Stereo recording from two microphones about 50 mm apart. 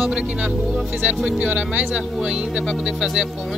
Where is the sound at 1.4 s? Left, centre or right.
Right.